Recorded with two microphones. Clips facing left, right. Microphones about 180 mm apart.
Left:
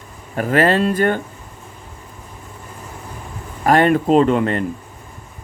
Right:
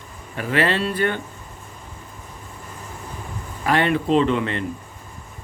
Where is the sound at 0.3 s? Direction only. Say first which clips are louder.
Left 6 dB; 45° left (ahead or behind).